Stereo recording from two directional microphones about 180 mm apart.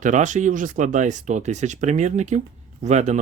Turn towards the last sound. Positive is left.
turn(degrees=-40)  # may be behind; listen again after turning